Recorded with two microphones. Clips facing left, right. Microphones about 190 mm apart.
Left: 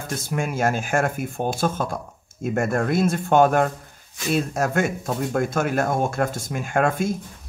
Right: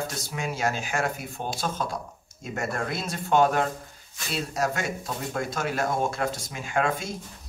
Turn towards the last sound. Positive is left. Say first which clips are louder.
# left 5 dB
turn(degrees=50)  # may be behind; listen again after turning